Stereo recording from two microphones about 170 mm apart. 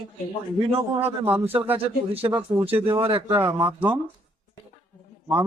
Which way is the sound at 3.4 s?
20° right (ahead or behind).